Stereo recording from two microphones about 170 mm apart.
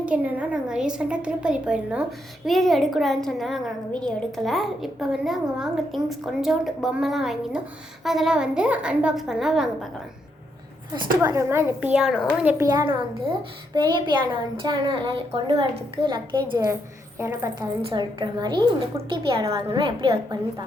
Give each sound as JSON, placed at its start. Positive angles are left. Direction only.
{"t": 0.0, "sound": "a woman's voice", "side_deg": -5}
{"t": 11.2, "sound": "a child's voice", "side_deg": -20}
{"t": 13.7, "sound": "a woman's voice", "side_deg": -25}
{"t": 17.2, "sound": "a child's voice", "side_deg": -15}
{"t": 17.8, "sound": "a woman's voice", "side_deg": -25}